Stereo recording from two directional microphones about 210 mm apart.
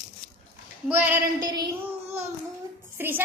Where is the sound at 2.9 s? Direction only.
10° right (ahead or behind).